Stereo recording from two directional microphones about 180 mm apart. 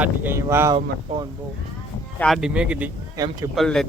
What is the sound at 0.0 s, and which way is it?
Speech, 10° right (ahead or behind).